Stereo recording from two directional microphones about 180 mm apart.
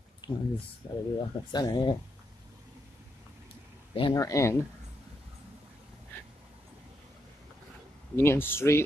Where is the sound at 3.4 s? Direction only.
30° left (ahead or behind).